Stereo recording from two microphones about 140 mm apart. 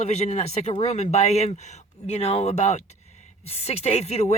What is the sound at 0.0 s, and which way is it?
Speech, 55° left (ahead or behind).